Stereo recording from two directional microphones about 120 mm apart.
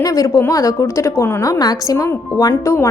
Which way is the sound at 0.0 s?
30° left (ahead or behind).